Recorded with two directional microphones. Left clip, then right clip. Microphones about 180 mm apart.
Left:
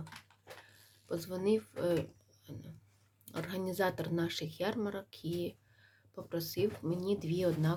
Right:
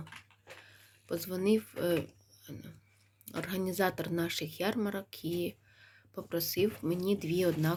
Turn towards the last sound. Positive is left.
turn(degrees=-15)  # may be behind; listen again after turning